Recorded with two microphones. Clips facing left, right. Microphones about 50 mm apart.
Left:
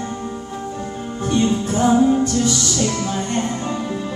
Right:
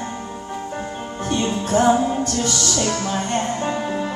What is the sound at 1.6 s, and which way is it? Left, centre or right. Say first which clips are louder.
Music: right 1 dB; right.